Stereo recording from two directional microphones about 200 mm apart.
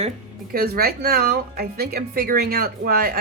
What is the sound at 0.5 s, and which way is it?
Speech, 50° right (ahead or behind).